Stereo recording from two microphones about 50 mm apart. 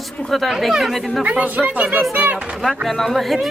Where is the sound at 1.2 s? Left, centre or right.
Right.